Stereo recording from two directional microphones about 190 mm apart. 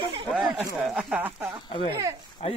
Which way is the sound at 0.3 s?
5° right (ahead or behind).